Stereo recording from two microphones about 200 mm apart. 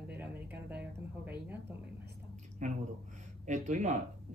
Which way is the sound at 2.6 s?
35° right (ahead or behind).